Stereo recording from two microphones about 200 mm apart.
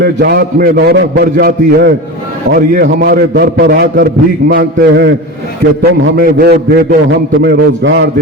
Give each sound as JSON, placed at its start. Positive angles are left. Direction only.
{"t": 0.0, "sound": "a man's voice", "side_deg": -55}